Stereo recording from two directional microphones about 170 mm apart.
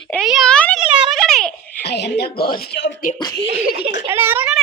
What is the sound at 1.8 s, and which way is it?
Speech, 75° left (ahead or behind).